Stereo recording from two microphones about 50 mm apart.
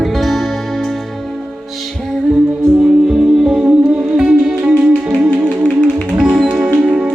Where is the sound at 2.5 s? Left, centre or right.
Right.